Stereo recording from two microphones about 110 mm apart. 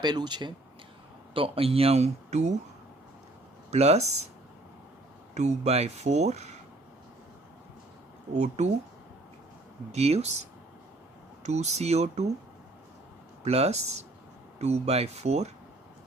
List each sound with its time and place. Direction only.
0.0 s speech: 40° right (ahead or behind)
1.3 s speech: 55° right (ahead or behind); by 2.6 s 90° right
3.7 s speech: 80° right
5.3 s speech: 90° right
8.3 s speech: 90° right
9.9 s speech: 75° right (ahead or behind)
11.4 s speech: 85° right
13.4 s speech: 70° right (ahead or behind)